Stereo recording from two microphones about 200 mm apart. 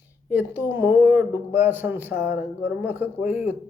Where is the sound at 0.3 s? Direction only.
10° right (ahead or behind).